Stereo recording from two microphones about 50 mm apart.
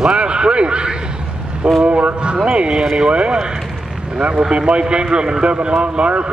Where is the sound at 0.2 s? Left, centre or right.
Right.